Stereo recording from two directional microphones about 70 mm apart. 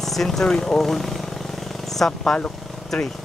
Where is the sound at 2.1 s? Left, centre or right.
Centre.